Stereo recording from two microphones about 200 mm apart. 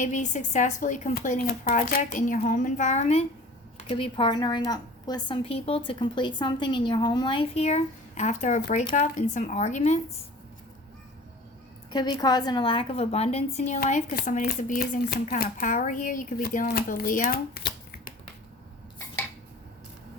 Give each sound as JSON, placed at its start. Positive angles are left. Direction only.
{"t": 0.0, "sound": "a woman's voice", "side_deg": 40}
{"t": 11.9, "sound": "a woman's voice", "side_deg": 20}
{"t": 17.5, "sound": "shuffling cards", "side_deg": 50}